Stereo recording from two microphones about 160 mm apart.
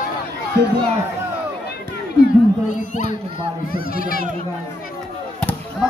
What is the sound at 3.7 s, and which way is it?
Speech, 65° left (ahead or behind).